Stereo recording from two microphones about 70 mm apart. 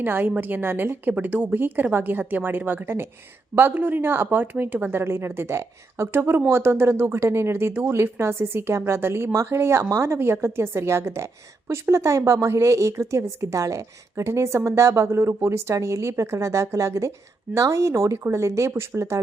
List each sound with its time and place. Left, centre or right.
0.0 s a woman's voice: right